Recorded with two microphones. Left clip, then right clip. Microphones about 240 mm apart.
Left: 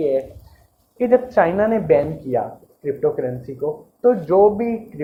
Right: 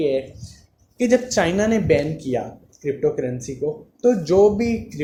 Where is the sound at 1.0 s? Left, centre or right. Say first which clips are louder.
Left 3 dB; right.